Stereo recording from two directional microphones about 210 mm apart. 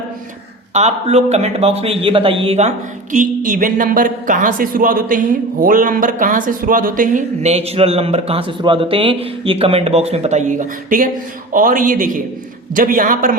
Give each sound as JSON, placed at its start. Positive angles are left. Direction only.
{"t": 0.7, "sound": "a man's voice", "side_deg": -30}